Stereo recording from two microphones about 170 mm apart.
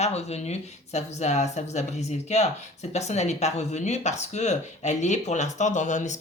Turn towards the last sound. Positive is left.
turn(degrees=45)  # may be behind; listen again after turning